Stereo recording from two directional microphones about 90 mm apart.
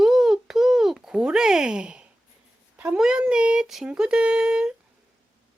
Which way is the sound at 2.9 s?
10° right (ahead or behind).